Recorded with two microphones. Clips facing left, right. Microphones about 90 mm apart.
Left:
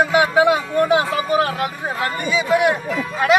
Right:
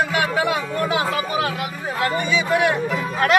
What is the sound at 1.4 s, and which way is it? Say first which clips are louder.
Speech: left 4 dB; 40° left (ahead or behind).